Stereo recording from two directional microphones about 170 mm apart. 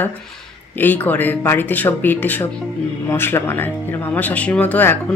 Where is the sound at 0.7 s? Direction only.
10° left (ahead or behind).